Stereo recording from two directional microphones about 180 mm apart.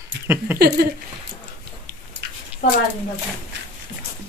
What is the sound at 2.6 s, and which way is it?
Speech, 45° left (ahead or behind).